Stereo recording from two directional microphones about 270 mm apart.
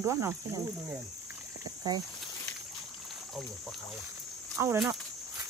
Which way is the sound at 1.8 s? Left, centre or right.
Centre.